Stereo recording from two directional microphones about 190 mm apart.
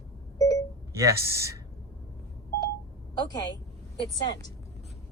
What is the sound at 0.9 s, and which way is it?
Speech, 15° right (ahead or behind).